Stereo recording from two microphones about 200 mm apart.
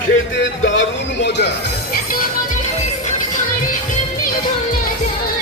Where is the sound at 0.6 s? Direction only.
65° left (ahead or behind).